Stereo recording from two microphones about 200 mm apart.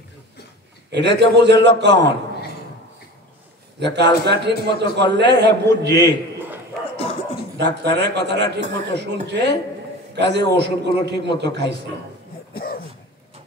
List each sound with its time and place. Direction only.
0.9 s a man's voice: 60° right (ahead or behind)
3.8 s a man's voice: 55° right (ahead or behind)
7.5 s a man's voice: 55° right (ahead or behind)
12.5 s throat clearing: 50° left (ahead or behind)